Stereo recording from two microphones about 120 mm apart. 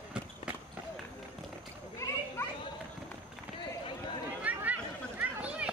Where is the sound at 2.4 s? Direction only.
20° left (ahead or behind).